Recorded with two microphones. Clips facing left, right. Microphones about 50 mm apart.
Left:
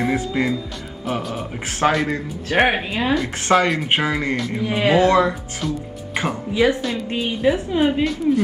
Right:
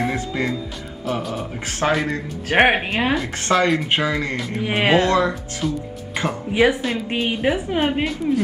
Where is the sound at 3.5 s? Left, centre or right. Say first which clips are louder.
Left 2 dB; left.